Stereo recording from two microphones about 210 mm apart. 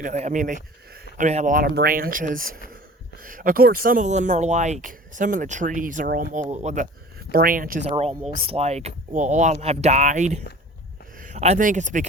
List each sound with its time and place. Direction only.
0.0 s speech: 35° right (ahead or behind)
7.3 s speech: 45° right (ahead or behind)